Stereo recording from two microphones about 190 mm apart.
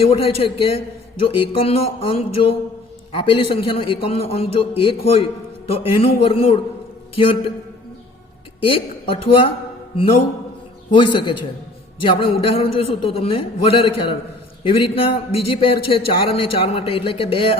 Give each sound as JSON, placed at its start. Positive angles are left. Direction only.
{"t": 0.0, "sound": "a man's voice", "side_deg": 30}
{"t": 8.6, "sound": "a man's voice", "side_deg": 30}